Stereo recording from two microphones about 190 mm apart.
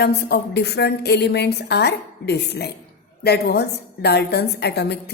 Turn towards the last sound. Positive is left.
turn(degrees=60)  # may be behind; listen again after turning